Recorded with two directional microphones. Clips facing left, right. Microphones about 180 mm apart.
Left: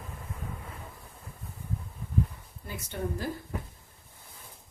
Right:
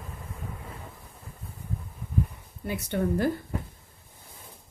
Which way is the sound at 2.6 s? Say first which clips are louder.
Right 7 dB; 65° right (ahead or behind).